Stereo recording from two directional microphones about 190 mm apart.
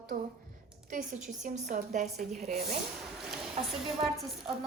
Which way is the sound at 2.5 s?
55° right (ahead or behind).